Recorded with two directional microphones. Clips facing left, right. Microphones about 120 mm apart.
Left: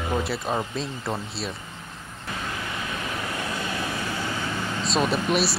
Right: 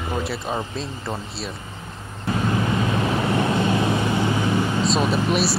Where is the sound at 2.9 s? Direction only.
30° right (ahead or behind).